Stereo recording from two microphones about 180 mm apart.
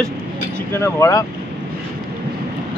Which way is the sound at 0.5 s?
15° left (ahead or behind).